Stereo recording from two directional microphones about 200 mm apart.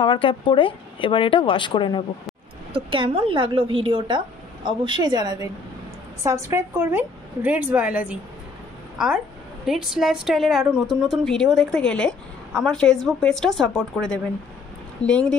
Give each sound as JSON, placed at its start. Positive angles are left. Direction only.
{"t": 0.0, "sound": "speech", "side_deg": 25}
{"t": 2.7, "sound": "a woman's voice", "side_deg": -25}